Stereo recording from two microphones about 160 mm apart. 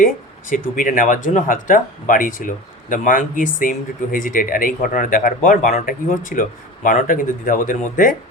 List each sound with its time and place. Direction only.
0.5 s speech: 60° left (ahead or behind)